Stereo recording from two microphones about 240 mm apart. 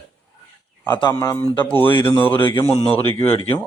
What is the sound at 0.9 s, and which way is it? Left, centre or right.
Speech, centre.